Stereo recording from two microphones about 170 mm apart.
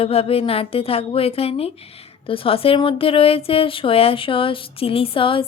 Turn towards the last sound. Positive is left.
turn(degrees=30)  # may be behind; listen again after turning